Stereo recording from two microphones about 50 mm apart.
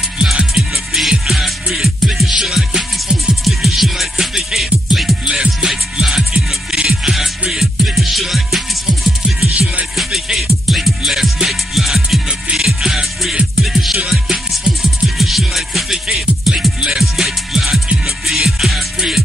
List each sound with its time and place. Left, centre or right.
0.2 s music: centre